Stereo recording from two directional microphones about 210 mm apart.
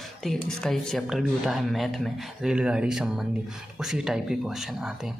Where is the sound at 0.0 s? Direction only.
Centre (ahead or behind).